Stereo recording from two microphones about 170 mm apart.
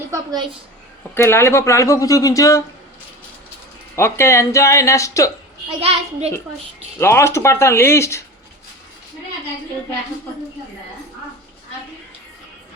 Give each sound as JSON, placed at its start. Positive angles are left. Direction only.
{"t": 0.1, "sound": "a woman's voice", "side_deg": -20}
{"t": 1.1, "sound": "speech", "side_deg": 15}
{"t": 3.9, "sound": "speech", "side_deg": 15}
{"t": 5.8, "sound": "a child's voice", "side_deg": -35}
{"t": 7.0, "sound": "speech", "side_deg": 15}